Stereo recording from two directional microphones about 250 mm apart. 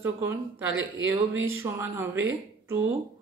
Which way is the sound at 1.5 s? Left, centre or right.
Centre.